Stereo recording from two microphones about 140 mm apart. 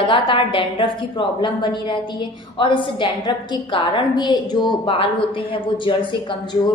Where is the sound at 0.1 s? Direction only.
35° left (ahead or behind).